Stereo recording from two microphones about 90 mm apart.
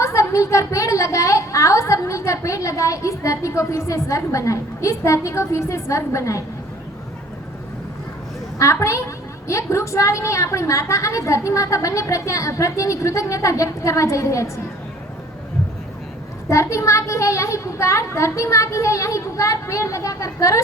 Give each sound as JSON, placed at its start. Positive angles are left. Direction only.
{"t": 0.0, "sound": "a woman's voice", "side_deg": 35}
{"t": 8.5, "sound": "a woman's voice", "side_deg": 35}
{"t": 16.5, "sound": "a woman's voice", "side_deg": 35}